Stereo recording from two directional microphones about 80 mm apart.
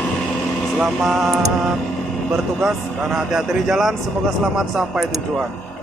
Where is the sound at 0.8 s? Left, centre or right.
Centre.